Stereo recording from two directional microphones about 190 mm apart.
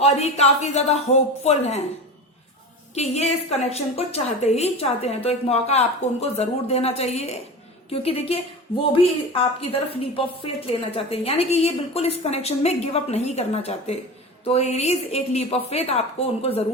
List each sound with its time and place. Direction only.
0.0 s a woman's voice: 35° left (ahead or behind)
2.9 s a woman's voice: 35° left (ahead or behind)